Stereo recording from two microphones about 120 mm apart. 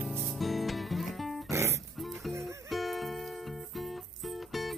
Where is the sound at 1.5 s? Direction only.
25° right (ahead or behind).